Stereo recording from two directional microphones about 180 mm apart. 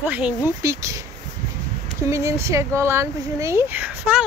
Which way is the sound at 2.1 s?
15° right (ahead or behind).